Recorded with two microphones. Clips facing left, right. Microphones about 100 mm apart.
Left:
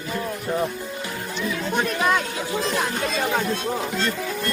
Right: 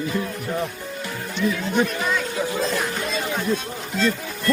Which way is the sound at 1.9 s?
55° left (ahead or behind).